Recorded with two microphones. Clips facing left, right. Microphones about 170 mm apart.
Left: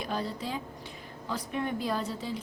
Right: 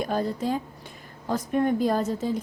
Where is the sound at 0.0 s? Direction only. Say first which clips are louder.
Right 7 dB; 45° right (ahead or behind).